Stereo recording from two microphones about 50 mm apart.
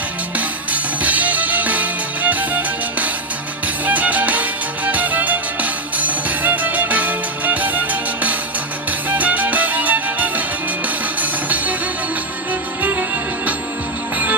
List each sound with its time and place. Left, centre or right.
1.0 s music: right